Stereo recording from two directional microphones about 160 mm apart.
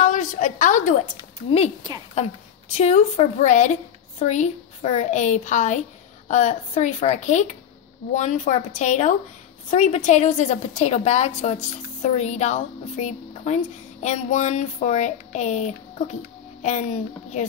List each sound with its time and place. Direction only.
0.0 s a woman's voice: 55° left (ahead or behind)